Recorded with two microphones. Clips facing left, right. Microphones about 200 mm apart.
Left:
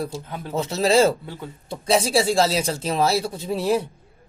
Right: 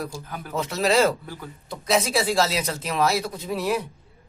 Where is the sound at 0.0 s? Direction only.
25° left (ahead or behind).